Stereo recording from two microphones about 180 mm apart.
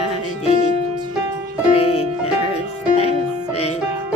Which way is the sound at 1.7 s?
35° left (ahead or behind).